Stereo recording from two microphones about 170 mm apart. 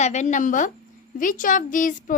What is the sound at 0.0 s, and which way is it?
A woman's voice, 45° left (ahead or behind).